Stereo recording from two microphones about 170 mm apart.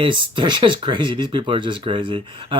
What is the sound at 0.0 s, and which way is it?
Speech, 30° right (ahead or behind).